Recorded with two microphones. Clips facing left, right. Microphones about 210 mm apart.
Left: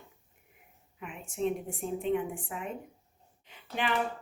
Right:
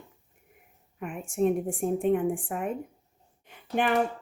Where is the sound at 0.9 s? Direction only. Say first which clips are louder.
Right 7 dB; 50° right (ahead or behind).